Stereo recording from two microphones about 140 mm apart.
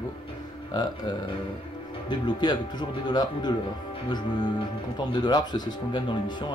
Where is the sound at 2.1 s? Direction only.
30° left (ahead or behind).